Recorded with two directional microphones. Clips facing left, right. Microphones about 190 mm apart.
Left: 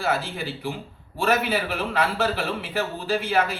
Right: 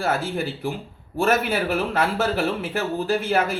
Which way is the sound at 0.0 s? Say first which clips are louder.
Right 2 dB; 45° right (ahead or behind).